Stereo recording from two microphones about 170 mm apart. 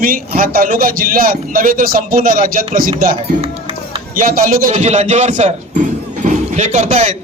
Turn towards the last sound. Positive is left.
turn(degrees=-40)  # may be behind; listen again after turning